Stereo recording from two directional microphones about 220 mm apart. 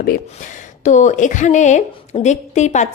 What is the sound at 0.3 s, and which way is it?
Speech, 35° left (ahead or behind).